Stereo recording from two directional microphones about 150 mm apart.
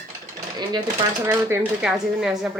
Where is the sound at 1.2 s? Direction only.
15° right (ahead or behind).